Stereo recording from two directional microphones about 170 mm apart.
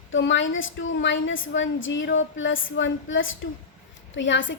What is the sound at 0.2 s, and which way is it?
A woman's voice, 90° left.